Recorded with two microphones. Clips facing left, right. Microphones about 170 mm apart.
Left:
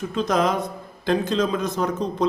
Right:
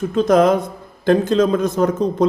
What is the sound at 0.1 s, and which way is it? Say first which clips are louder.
A man's voice: right 8 dB; 50° right (ahead or behind).